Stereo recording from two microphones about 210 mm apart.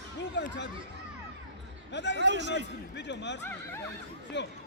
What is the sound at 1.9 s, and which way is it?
Speech, 55° left (ahead or behind).